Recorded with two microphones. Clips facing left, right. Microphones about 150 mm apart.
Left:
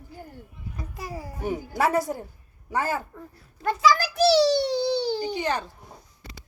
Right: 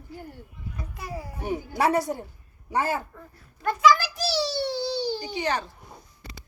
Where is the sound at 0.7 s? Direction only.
40° left (ahead or behind).